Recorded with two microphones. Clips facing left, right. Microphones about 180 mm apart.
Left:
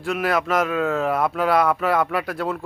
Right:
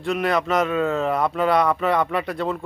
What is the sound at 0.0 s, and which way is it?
Speech, centre (ahead or behind).